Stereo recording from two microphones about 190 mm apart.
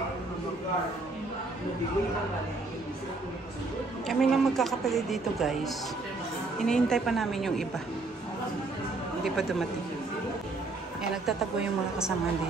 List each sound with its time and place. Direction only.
4.1 s a woman's voice: centre (ahead or behind)
9.2 s a woman's voice: centre (ahead or behind)
11.2 s a woman's voice: 5° right (ahead or behind)